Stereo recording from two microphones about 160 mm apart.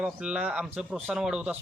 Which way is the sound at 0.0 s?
5° right (ahead or behind).